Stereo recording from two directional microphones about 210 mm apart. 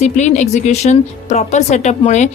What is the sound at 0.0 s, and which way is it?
Speech, 35° left (ahead or behind).